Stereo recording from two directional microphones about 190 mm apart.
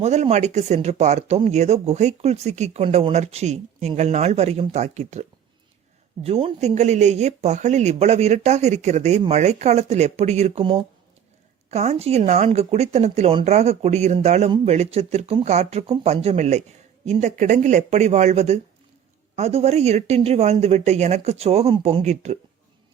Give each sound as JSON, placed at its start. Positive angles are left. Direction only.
{"t": 0.0, "sound": "speech", "side_deg": -35}
{"t": 6.2, "sound": "speech", "side_deg": -30}